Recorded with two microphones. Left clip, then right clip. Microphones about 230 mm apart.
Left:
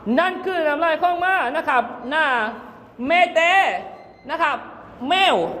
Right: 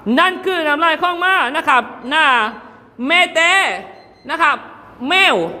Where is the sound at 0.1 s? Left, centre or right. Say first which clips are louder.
Right 5 dB; right.